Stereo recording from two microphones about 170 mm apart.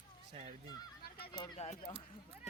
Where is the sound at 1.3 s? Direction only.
25° left (ahead or behind).